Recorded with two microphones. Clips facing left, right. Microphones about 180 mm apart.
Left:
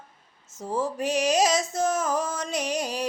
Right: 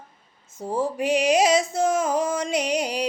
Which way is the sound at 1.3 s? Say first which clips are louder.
Right 4 dB; 10° right (ahead or behind).